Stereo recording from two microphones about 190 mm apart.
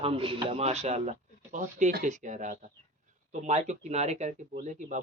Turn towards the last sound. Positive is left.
turn(degrees=-35)  # may be behind; listen again after turning